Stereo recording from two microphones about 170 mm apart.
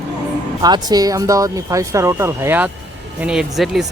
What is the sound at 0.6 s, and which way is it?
Speech, 25° right (ahead or behind).